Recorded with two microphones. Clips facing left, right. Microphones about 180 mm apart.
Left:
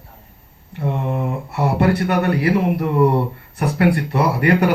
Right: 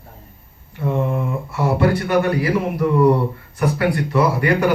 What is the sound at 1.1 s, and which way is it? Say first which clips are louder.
Speech: even; 65° left (ahead or behind).